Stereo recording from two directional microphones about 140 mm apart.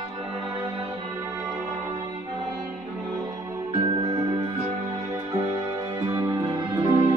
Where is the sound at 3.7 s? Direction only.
30° right (ahead or behind).